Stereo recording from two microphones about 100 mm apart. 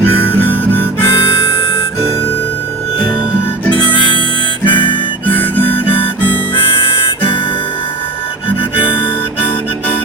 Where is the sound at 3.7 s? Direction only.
60° left (ahead or behind).